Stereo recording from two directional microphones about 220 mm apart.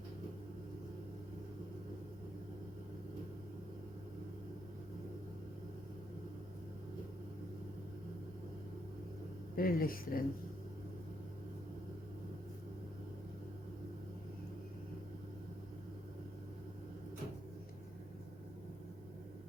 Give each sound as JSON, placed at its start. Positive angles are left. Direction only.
{"t": 9.6, "sound": "speech", "side_deg": 40}